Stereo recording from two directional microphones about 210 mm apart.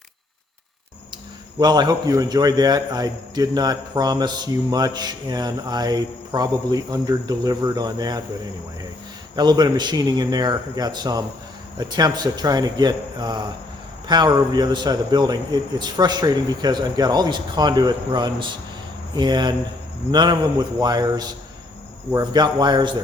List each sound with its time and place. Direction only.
1.5 s a man's voice: 20° right (ahead or behind)
9.3 s a man's voice: 20° right (ahead or behind)